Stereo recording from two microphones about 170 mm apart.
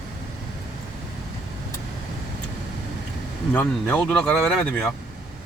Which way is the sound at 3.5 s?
10° left (ahead or behind).